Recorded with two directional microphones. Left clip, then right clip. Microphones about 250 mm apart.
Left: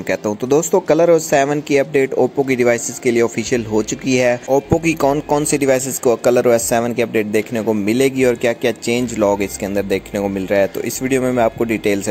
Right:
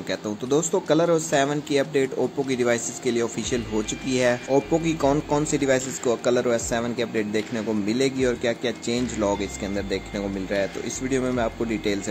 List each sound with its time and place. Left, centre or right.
0.1 s speech: left